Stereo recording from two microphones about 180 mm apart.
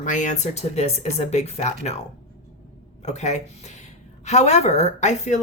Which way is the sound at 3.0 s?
40° left (ahead or behind).